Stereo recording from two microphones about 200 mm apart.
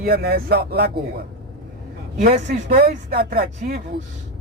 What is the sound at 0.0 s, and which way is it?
Speech, 50° right (ahead or behind).